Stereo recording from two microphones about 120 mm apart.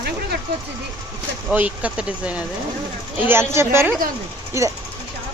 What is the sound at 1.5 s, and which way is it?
Speech, 10° right (ahead or behind).